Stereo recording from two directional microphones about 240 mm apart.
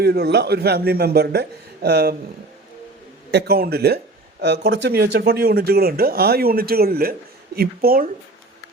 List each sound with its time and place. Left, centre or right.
0.0 s speech: right
3.3 s speech: right